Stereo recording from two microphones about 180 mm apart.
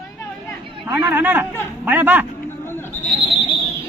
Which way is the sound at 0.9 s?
10° right (ahead or behind).